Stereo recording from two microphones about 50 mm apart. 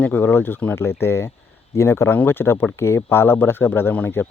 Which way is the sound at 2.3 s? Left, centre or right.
Left.